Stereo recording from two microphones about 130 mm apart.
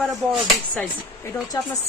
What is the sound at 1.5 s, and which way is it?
Speech, 30° left (ahead or behind).